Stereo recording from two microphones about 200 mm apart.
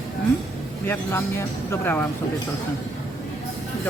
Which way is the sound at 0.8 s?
15° left (ahead or behind).